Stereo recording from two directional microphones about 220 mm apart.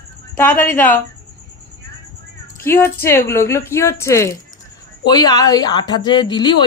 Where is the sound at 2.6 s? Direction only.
10° left (ahead or behind).